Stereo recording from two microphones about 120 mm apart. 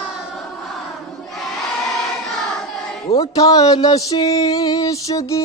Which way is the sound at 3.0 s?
30° left (ahead or behind).